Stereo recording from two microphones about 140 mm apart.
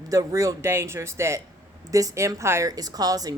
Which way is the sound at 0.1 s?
25° right (ahead or behind).